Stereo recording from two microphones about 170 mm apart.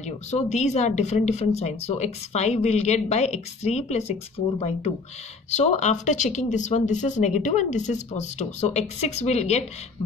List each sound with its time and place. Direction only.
0.0 s speech: 40° left (ahead or behind)